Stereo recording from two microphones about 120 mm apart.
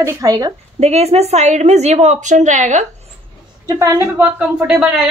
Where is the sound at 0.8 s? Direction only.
60° right (ahead or behind); by 2.9 s 85° right.